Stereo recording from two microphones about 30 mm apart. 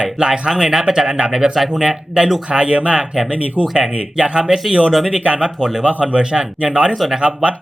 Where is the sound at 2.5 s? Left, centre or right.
Right.